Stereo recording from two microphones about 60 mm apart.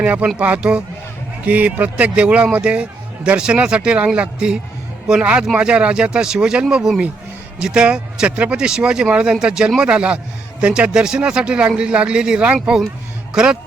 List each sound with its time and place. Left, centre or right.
0.0 s a man's voice: right